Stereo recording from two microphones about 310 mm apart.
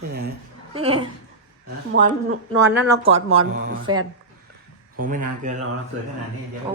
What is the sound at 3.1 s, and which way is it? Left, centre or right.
Speech, right.